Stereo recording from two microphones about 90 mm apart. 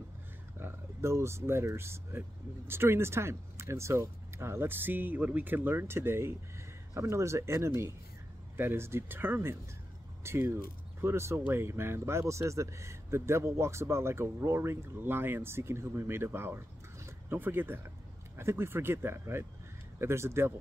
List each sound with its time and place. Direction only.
0.6 s speech: 30° right (ahead or behind)